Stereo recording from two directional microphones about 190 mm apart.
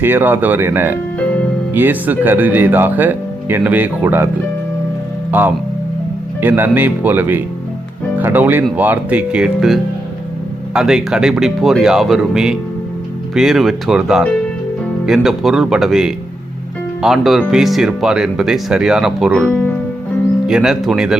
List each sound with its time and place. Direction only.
0.0 s speech: 10° right (ahead or behind)
5.3 s speech: 10° right (ahead or behind)
20.5 s speech: 5° right (ahead or behind)